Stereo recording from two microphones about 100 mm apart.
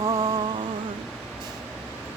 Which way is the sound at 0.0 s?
40° right (ahead or behind).